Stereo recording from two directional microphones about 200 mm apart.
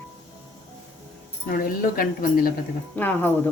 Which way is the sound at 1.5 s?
45° left (ahead or behind).